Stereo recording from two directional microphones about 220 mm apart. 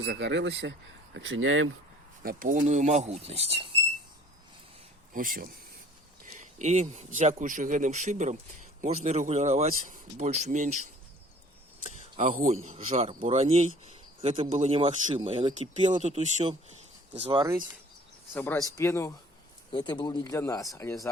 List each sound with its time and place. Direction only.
0.0 s speech: 55° right (ahead or behind)
2.2 s speech: 35° right (ahead or behind)
5.1 s speech: 40° right (ahead or behind)
11.9 s a sound: 30° right (ahead or behind)
12.6 s a man's voice: 30° right (ahead or behind)
18.3 s speech: 10° left (ahead or behind)